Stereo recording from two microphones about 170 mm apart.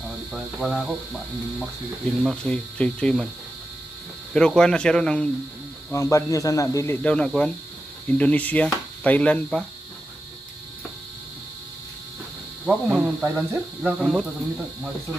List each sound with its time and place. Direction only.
0.3 s speech: 5° right (ahead or behind)
2.2 s speech: 5° left (ahead or behind)
4.3 s speech: 5° left (ahead or behind)
5.9 s speech: 20° left (ahead or behind)
12.6 s speech: 5° right (ahead or behind)